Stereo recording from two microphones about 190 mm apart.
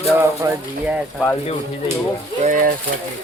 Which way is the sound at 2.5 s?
45° right (ahead or behind).